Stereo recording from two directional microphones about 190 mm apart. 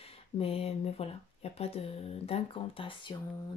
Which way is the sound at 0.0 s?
30° left (ahead or behind).